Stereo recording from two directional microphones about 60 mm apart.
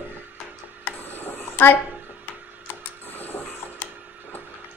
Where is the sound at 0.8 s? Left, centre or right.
Left.